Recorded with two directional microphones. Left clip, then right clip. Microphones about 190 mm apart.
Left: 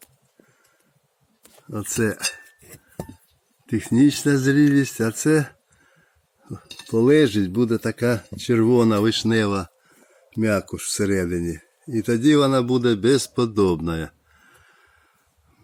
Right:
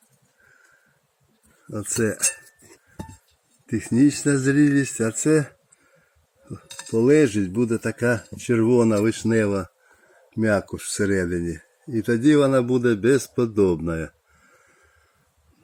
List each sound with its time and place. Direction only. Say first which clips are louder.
1.7 s speech: even; 15° left (ahead or behind)
3.7 s speech: left 1 dB; 15° left (ahead or behind)